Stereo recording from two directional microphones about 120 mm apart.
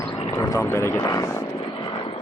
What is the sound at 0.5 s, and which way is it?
Speech, 25° left (ahead or behind).